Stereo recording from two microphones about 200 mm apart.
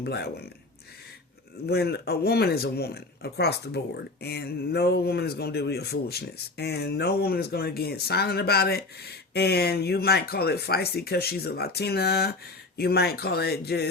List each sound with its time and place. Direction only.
0.0 s speech: 55° left (ahead or behind)
1.6 s speech: 55° left (ahead or behind)